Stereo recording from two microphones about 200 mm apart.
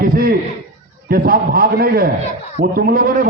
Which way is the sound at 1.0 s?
45° right (ahead or behind).